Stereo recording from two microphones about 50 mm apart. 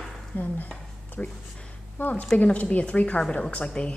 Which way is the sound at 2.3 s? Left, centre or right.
Left.